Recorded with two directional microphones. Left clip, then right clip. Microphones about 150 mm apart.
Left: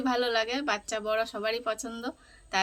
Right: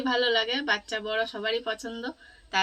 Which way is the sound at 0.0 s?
30° left (ahead or behind).